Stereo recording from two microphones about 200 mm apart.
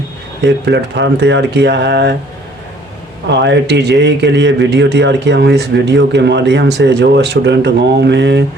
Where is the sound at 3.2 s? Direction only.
60° right (ahead or behind).